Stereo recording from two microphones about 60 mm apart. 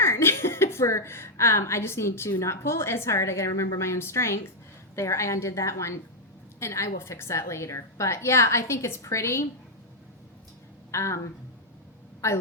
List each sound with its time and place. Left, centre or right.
0.0 s a woman's voice: left
10.9 s a woman's voice: left